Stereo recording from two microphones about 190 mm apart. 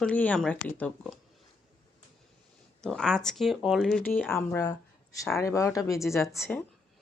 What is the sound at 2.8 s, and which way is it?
Speech, 5° left (ahead or behind).